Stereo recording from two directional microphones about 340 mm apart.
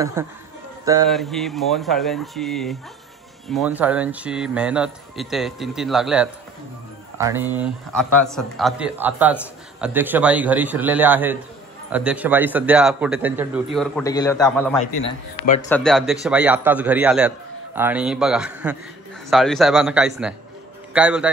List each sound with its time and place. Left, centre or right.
0.0 s a man's voice: centre
15.0 s speech: left
15.7 s a man's voice: centre